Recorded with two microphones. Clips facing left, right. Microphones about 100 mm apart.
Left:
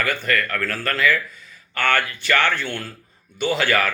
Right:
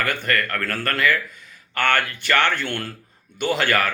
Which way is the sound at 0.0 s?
55° right (ahead or behind).